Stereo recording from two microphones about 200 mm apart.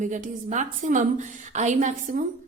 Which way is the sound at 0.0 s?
40° right (ahead or behind).